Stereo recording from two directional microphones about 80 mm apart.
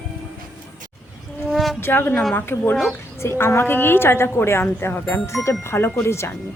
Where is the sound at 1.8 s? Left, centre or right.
Left.